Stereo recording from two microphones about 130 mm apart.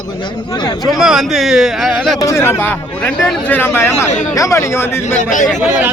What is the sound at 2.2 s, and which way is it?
Speech, 20° left (ahead or behind).